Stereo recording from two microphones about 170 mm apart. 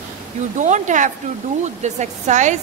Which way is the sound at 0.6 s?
45° right (ahead or behind).